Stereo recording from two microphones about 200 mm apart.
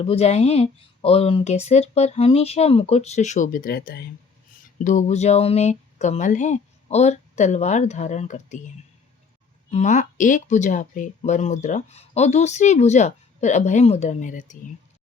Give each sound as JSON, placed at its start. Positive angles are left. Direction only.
{"t": 0.0, "sound": "speech", "side_deg": 30}
{"t": 9.6, "sound": "speech", "side_deg": 35}